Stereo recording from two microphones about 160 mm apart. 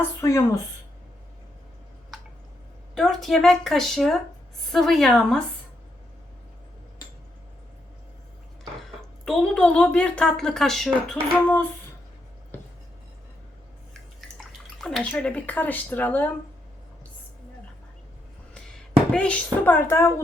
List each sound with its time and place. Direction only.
0.0 s speech: 15° left (ahead or behind)
2.9 s speech: centre (ahead or behind)
9.2 s speech: 5° left (ahead or behind)
14.8 s speech: 5° left (ahead or behind)
19.1 s speech: 5° left (ahead or behind)